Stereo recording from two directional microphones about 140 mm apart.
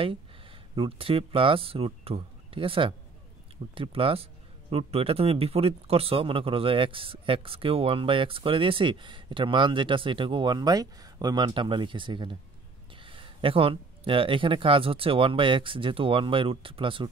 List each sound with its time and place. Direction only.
0.7 s a man's voice: 40° right (ahead or behind)